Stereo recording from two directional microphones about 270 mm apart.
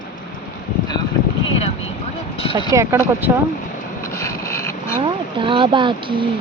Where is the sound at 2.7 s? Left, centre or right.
Centre.